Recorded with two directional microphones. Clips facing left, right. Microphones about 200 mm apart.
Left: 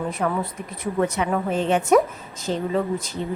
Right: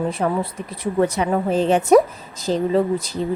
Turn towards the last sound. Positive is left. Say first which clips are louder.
# right 5 dB
turn(degrees=-35)  # may be behind; listen again after turning